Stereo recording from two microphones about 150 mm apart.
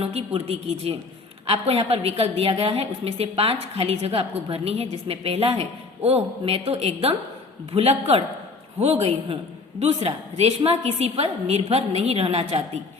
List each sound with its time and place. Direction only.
0.0 s a woman's voice: 40° right (ahead or behind)